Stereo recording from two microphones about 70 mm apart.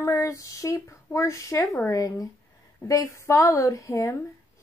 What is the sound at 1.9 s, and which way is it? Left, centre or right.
A woman's voice, left.